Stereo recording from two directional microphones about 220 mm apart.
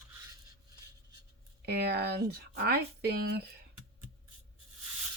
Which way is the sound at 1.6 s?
45° right (ahead or behind).